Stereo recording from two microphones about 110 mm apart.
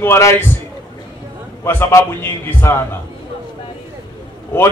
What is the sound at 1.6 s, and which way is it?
A man's voice, 20° left (ahead or behind).